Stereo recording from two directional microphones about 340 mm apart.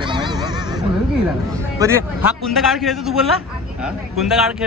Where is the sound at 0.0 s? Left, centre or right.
Centre.